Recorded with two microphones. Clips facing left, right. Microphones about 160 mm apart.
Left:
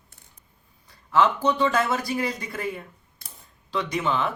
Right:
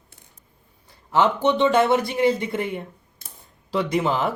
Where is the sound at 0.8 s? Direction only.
30° right (ahead or behind).